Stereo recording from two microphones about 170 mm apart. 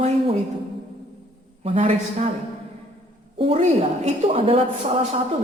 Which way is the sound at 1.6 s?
35° right (ahead or behind).